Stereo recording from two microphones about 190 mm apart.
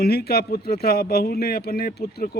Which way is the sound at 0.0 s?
55° left (ahead or behind).